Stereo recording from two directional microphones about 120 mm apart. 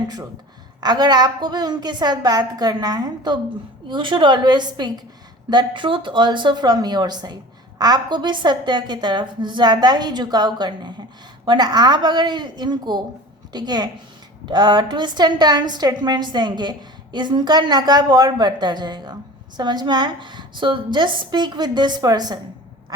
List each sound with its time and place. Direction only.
0.8 s a woman's voice: 35° right (ahead or behind)